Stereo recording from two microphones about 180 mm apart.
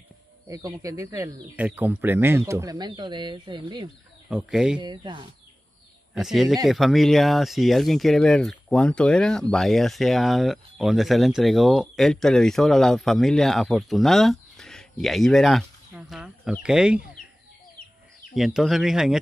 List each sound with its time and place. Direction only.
0.5 s speech: 20° right (ahead or behind)
4.3 s speech: 5° right (ahead or behind)
4.7 s speech: 25° right (ahead or behind)
6.1 s speech: centre (ahead or behind)
18.3 s speech: centre (ahead or behind)